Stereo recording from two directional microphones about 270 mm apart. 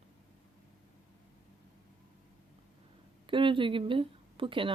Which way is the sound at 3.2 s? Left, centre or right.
Centre.